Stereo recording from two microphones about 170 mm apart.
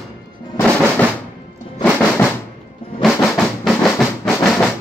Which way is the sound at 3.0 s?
Centre (ahead or behind).